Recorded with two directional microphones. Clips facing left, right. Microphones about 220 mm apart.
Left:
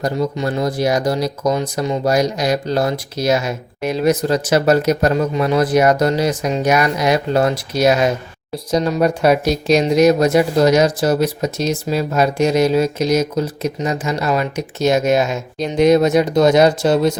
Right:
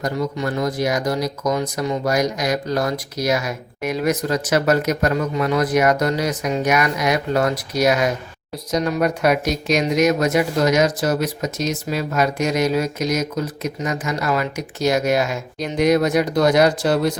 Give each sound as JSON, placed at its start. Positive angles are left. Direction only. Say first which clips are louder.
{"t": 0.0, "sound": "speech", "louder": "left 3 dB", "side_deg": 30}